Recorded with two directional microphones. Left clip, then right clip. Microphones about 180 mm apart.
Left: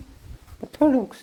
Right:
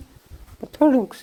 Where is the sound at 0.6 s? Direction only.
10° right (ahead or behind).